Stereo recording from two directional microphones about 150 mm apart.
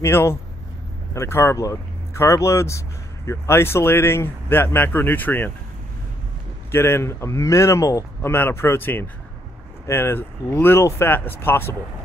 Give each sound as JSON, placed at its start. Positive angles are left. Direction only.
{"t": 0.0, "sound": "speech", "side_deg": 15}
{"t": 6.7, "sound": "speech", "side_deg": 15}